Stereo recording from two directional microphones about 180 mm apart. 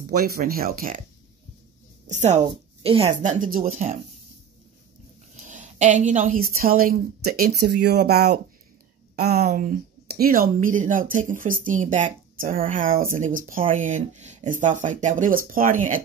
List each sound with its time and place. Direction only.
0.1 s speech: 55° right (ahead or behind)
2.0 s a woman's voice: 40° right (ahead or behind)
5.3 s speech: 45° right (ahead or behind)